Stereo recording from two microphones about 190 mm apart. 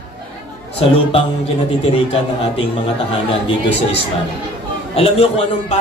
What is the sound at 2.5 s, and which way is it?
Speech, 30° left (ahead or behind).